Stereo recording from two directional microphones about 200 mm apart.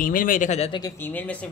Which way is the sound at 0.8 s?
10° left (ahead or behind).